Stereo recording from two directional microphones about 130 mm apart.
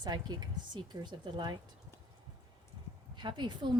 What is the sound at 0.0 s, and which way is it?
Speech, 30° right (ahead or behind).